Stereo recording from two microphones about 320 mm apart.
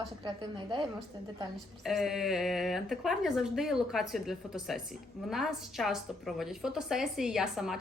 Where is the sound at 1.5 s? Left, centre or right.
Centre.